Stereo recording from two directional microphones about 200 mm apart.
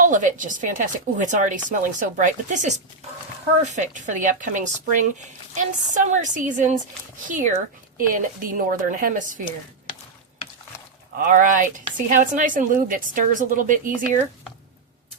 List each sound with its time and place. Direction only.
0.0 s a woman's voice: 40° right (ahead or behind)
11.3 s a woman's voice: 40° right (ahead or behind)